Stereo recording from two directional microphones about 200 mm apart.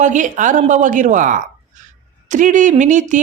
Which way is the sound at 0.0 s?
40° right (ahead or behind).